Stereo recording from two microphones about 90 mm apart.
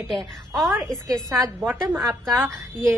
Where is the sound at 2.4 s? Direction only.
30° right (ahead or behind).